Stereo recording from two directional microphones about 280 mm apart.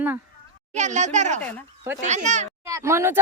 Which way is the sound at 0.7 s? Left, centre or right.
Right.